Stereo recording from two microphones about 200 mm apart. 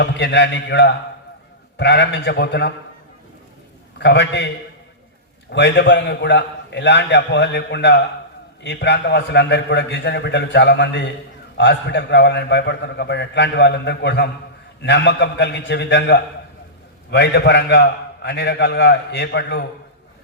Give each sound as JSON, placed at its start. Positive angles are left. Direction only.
{"t": 0.0, "sound": "a man's voice", "side_deg": 60}
{"t": 4.0, "sound": "a man's voice", "side_deg": 60}